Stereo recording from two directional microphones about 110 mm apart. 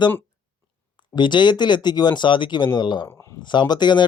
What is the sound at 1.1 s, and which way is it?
Speech, 45° left (ahead or behind).